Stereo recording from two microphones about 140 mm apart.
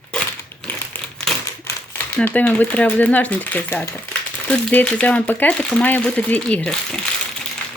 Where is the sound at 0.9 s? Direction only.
15° left (ahead or behind).